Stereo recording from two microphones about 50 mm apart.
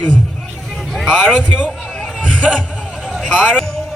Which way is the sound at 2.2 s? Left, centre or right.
Left.